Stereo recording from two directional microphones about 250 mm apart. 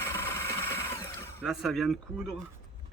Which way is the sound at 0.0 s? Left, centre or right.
Centre.